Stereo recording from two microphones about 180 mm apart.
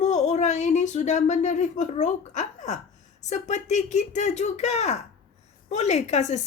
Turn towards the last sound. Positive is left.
turn(degrees=40)  # may be behind; listen again after turning